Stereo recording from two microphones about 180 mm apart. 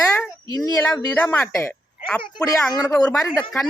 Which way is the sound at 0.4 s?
20° left (ahead or behind).